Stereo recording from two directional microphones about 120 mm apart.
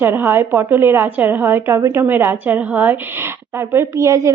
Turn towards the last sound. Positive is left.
turn(degrees=-25)  # may be behind; listen again after turning